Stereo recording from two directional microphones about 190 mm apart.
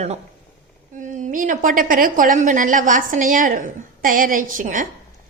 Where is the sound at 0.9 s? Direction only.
40° right (ahead or behind).